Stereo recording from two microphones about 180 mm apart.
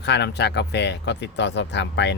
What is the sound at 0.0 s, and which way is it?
Speech, 70° left (ahead or behind).